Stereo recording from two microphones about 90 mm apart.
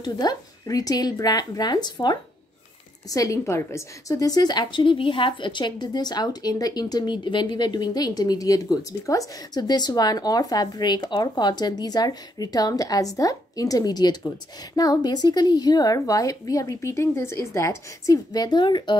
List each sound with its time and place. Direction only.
0.0 s a woman's voice: 50° left (ahead or behind)
3.1 s a woman's voice: 40° left (ahead or behind); by 18.9 s 60° left (ahead or behind)